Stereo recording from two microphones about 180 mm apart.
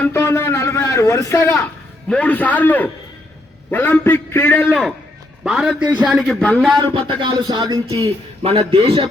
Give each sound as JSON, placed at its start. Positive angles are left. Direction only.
{"t": 0.0, "sound": "a sound", "side_deg": 15}
{"t": 2.0, "sound": "a man's voice", "side_deg": 5}
{"t": 5.4, "sound": "speech", "side_deg": -5}
{"t": 6.7, "sound": "speech", "side_deg": -25}